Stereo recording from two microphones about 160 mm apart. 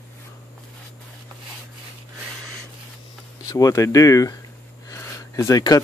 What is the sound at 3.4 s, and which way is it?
Speech, 20° left (ahead or behind).